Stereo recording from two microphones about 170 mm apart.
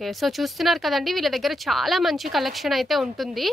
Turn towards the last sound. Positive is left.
turn(degrees=0)  # may be behind; listen again after turning